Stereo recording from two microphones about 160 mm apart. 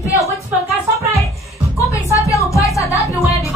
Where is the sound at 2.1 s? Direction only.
20° left (ahead or behind).